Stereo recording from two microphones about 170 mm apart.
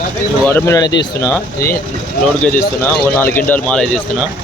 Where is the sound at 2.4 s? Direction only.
10° left (ahead or behind).